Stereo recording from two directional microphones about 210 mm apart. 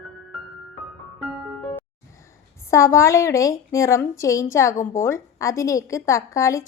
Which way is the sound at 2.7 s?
15° left (ahead or behind).